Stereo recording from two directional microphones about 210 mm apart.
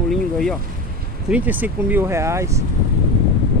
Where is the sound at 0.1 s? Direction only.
Centre (ahead or behind).